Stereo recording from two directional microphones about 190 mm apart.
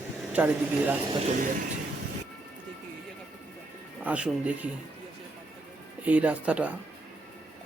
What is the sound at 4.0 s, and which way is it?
Speech, 5° right (ahead or behind).